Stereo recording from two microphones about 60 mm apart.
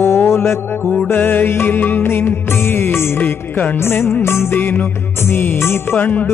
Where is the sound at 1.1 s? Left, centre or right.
Left.